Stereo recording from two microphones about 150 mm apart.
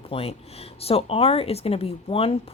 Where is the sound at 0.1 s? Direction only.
40° left (ahead or behind).